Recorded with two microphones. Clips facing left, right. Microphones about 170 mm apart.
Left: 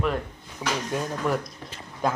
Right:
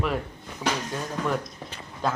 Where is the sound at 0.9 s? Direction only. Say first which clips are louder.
Left 2 dB; 5° left (ahead or behind).